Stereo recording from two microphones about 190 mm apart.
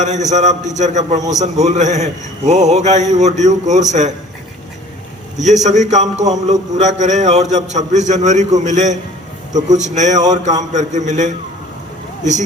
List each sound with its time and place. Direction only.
0.0 s a man's voice: 40° right (ahead or behind)
5.5 s a man's voice: 40° right (ahead or behind)